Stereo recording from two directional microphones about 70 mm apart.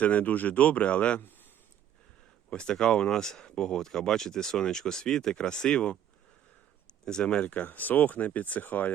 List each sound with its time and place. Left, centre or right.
0.0 s speech: left
2.5 s speech: centre
7.0 s speech: centre